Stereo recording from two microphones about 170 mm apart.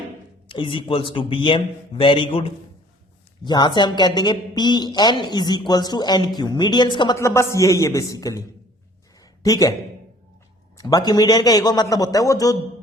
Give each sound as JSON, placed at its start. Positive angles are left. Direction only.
{"t": 0.4, "sound": "speech", "side_deg": 30}
{"t": 10.8, "sound": "speech", "side_deg": 20}